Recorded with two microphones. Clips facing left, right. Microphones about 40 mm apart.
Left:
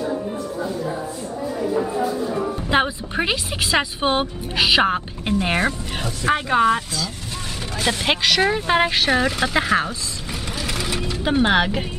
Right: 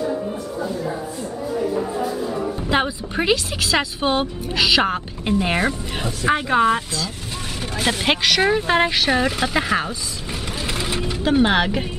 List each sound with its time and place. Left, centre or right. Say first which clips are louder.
2.7 s speech: left 1 dB; centre
10.5 s a sound: even; centre
11.0 s mechanisms: right 1 dB; centre
11.3 s speech: even; centre